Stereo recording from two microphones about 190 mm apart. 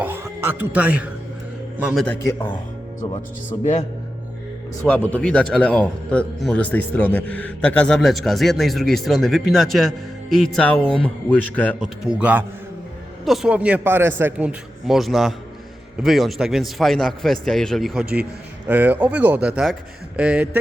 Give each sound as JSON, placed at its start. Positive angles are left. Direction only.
{"t": 0.0, "sound": "music", "side_deg": -10}
{"t": 1.8, "sound": "a man's voice", "side_deg": 0}
{"t": 3.6, "sound": "a man's voice", "side_deg": 35}
{"t": 4.8, "sound": "a man's voice", "side_deg": 10}
{"t": 11.8, "sound": "a man's voice", "side_deg": -5}